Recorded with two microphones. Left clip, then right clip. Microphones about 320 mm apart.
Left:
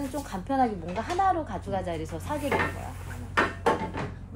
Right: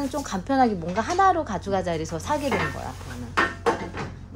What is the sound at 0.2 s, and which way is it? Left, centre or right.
A woman's voice, right.